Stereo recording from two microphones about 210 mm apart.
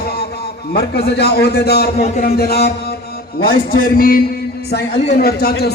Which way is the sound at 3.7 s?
45° left (ahead or behind).